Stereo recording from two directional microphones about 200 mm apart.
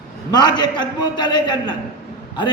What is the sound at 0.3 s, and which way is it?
Speech, 20° left (ahead or behind).